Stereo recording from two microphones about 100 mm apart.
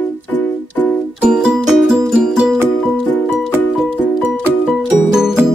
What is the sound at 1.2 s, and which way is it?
Music, 5° right (ahead or behind).